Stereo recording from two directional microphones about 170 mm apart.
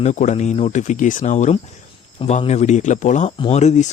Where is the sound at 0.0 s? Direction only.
45° left (ahead or behind).